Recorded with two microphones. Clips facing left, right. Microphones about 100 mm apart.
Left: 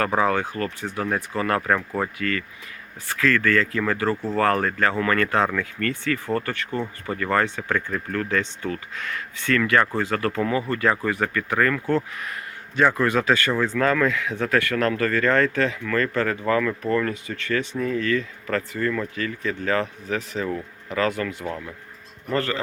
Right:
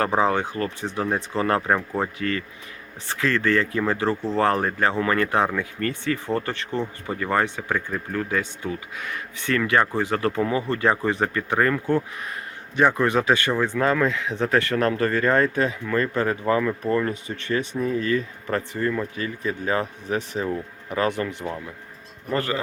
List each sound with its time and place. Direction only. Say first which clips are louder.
0.0 s a man's voice: even; 20° right (ahead or behind)